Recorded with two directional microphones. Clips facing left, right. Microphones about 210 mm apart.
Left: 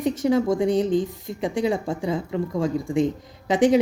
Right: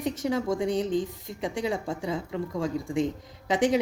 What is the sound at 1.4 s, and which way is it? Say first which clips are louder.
Speech: left 6 dB; 30° left (ahead or behind).